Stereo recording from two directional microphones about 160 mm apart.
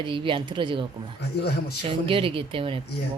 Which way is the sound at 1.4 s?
90° left.